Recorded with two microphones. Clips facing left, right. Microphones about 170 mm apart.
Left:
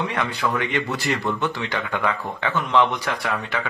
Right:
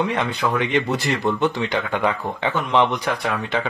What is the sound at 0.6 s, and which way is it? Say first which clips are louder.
Speech: right 4 dB; 20° right (ahead or behind).